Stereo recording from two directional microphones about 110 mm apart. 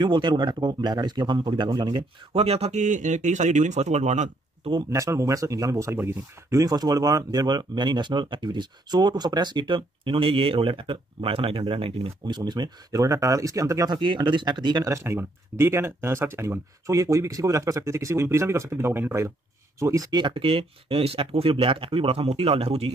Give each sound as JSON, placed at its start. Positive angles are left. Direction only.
{"t": 0.0, "sound": "speech", "side_deg": -45}
{"t": 2.3, "sound": "speech", "side_deg": -70}
{"t": 4.9, "sound": "speech", "side_deg": -30}
{"t": 6.6, "sound": "speech", "side_deg": -35}
{"t": 12.3, "sound": "speech", "side_deg": -40}
{"t": 13.9, "sound": "speech", "side_deg": -45}
{"t": 14.9, "sound": "speech", "side_deg": -25}